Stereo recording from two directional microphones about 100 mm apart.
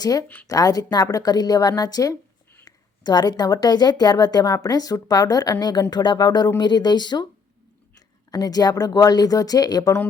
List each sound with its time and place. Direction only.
0.0 s a woman's voice: 40° left (ahead or behind)
8.3 s speech: 40° left (ahead or behind)